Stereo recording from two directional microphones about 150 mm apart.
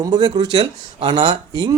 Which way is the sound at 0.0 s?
25° right (ahead or behind).